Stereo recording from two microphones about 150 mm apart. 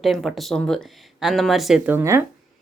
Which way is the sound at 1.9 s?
15° right (ahead or behind).